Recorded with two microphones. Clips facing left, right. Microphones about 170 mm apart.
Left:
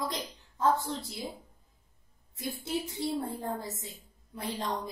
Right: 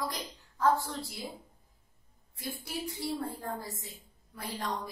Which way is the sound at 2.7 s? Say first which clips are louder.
Left 4 dB; 20° left (ahead or behind).